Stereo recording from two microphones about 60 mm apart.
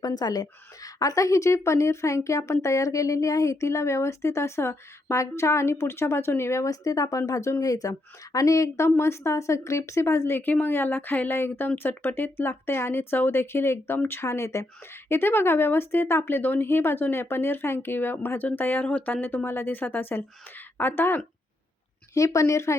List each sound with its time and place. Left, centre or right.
0.0 s speech: left
0.9 s a woman's voice: left
6.7 s speech: left
7.6 s speech: left
10.4 s speech: left
14.3 s a woman's voice: left
15.1 s speech: left
22.1 s speech: left